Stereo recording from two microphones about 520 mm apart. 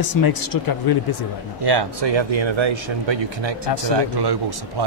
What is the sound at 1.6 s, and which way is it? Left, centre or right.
A man's voice, right.